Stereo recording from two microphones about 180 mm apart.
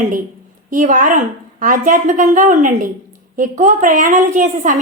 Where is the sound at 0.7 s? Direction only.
45° right (ahead or behind).